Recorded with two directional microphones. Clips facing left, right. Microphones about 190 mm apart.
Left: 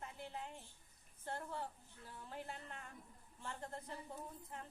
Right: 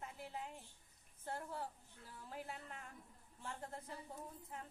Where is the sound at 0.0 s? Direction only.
5° right (ahead or behind).